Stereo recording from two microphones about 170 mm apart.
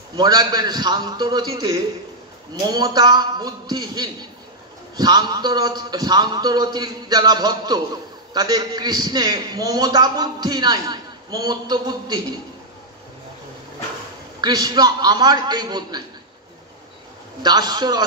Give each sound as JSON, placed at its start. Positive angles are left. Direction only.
{"t": 0.2, "sound": "a man's voice", "side_deg": -25}
{"t": 14.4, "sound": "a man's voice", "side_deg": -25}
{"t": 17.4, "sound": "a man's voice", "side_deg": -25}